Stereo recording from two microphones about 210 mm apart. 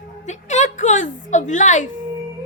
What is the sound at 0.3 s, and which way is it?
A woman's voice, 35° left (ahead or behind).